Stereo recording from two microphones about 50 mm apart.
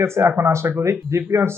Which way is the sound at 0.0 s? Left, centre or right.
Right.